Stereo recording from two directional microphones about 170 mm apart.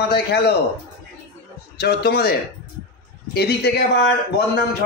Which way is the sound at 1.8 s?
70° left (ahead or behind).